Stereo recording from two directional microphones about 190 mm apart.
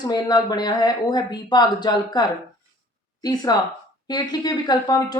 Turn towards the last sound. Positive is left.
turn(degrees=20)  # may be behind; listen again after turning